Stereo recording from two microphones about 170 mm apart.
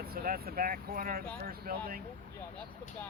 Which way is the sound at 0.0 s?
60° right (ahead or behind).